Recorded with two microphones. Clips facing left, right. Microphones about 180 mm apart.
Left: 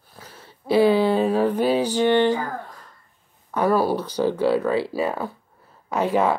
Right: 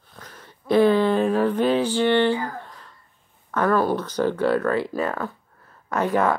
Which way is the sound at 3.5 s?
10° left (ahead or behind).